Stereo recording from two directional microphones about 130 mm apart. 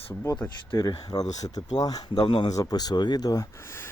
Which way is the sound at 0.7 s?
30° left (ahead or behind).